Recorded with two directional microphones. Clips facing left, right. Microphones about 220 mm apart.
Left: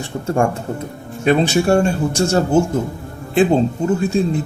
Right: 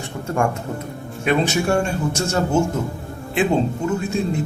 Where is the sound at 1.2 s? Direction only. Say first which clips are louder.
Left 4 dB; 35° left (ahead or behind).